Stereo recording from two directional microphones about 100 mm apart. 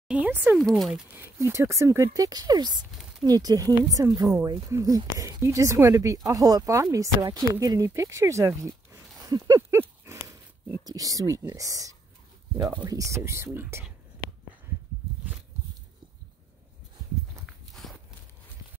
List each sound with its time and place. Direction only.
0.1 s speech: 15° right (ahead or behind)
0.6 s speech: centre (ahead or behind)
1.1 s speech: 25° right (ahead or behind)
2.8 s a sound: 10° right (ahead or behind)
3.3 s speech: 40° right (ahead or behind)
9.7 s horse: 30° right (ahead or behind)
10.9 s speech: 35° right (ahead or behind)
17.8 s walk: 5° left (ahead or behind)